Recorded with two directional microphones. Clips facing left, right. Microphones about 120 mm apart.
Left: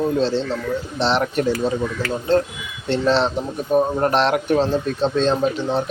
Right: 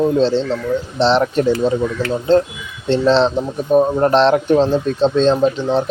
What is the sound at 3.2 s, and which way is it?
A man's voice, 30° right (ahead or behind).